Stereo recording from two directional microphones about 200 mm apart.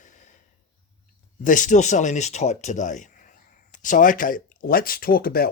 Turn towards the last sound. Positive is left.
turn(degrees=50)  # may be behind; listen again after turning